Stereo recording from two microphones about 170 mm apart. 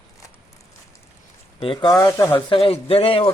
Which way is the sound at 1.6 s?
30° left (ahead or behind).